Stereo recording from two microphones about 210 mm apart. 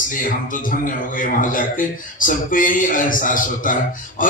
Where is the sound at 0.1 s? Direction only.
40° left (ahead or behind).